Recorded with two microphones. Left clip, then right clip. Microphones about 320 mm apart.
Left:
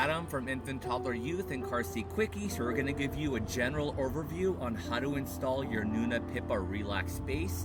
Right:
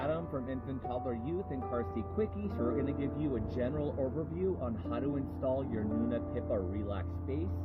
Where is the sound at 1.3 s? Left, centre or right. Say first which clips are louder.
Left 2 dB; left.